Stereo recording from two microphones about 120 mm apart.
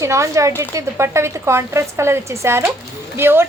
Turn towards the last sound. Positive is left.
turn(degrees=-20)  # may be behind; listen again after turning